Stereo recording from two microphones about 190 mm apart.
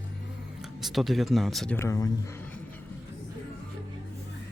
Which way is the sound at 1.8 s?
15° left (ahead or behind).